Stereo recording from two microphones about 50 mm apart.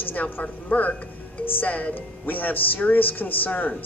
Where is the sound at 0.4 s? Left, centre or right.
Left.